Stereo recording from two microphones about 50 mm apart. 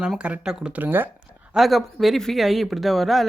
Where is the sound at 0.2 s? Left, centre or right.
Centre.